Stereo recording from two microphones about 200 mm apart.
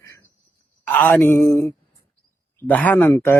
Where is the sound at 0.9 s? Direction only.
10° left (ahead or behind).